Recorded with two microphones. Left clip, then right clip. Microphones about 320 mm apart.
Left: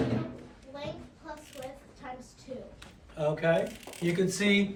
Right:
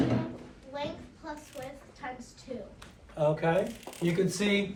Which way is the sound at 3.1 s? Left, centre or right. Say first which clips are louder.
Even; centre.